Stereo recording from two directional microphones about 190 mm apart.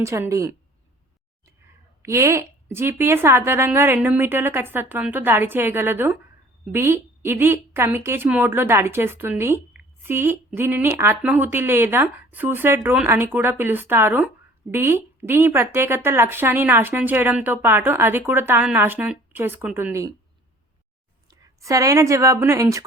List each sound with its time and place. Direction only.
0.0 s a woman's voice: 15° right (ahead or behind)
2.0 s a woman's voice: 15° right (ahead or behind)
21.2 s a woman's voice: 15° right (ahead or behind)